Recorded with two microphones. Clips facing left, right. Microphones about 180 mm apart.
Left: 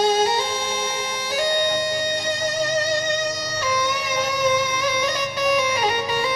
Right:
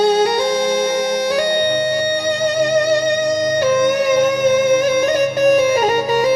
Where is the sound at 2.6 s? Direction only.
60° right (ahead or behind).